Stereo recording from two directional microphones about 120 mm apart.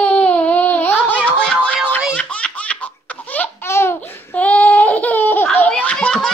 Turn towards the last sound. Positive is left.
turn(degrees=5)  # may be behind; listen again after turning